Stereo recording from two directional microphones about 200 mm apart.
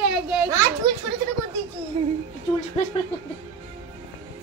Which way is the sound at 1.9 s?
30° right (ahead or behind).